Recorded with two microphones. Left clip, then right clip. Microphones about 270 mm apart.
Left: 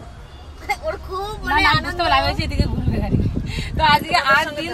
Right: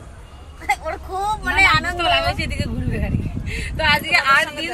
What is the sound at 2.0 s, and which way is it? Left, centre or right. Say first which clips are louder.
A woman's voice: left 1 dB; centre.